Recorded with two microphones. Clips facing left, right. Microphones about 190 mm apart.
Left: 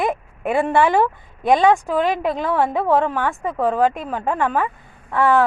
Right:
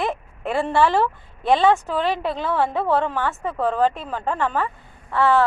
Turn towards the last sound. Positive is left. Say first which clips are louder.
# left 2 dB
turn(degrees=15)  # may be behind; listen again after turning